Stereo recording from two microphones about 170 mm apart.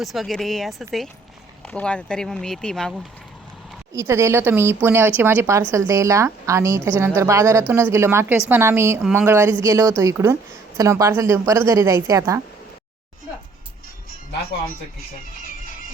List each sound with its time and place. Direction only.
0.0 s speech: centre (ahead or behind)
3.9 s a woman's voice: 15° right (ahead or behind)